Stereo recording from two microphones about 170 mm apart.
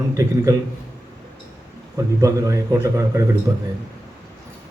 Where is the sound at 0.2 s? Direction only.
20° right (ahead or behind).